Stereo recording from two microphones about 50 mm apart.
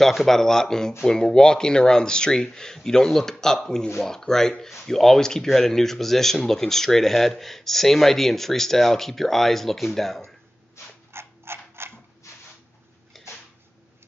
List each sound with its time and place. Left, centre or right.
0.0 s speech: centre
11.1 s mechanisms: right
13.1 s a sound: centre